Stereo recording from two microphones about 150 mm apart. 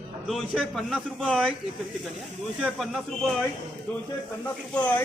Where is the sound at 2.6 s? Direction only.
Centre (ahead or behind).